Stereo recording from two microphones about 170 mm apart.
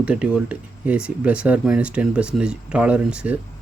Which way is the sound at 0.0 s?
5° right (ahead or behind).